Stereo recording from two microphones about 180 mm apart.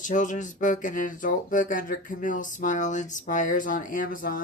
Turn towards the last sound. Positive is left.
turn(degrees=50)  # may be behind; listen again after turning